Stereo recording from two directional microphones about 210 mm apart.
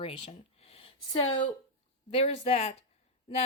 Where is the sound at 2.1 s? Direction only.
30° left (ahead or behind).